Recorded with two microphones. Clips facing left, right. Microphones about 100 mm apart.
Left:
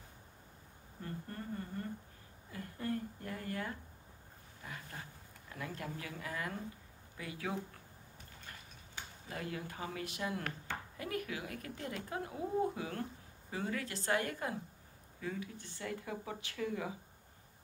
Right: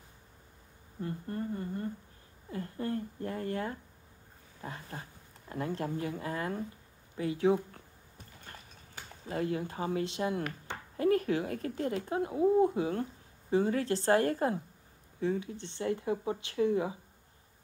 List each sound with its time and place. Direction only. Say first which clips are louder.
1.0 s speech: right 8 dB; 30° right (ahead or behind)
9.3 s speech: right 9 dB; 30° right (ahead or behind)